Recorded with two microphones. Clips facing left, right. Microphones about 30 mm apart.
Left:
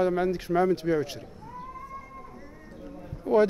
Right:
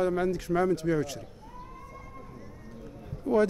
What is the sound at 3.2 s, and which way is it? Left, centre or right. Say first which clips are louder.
Speech: left 3 dB; left.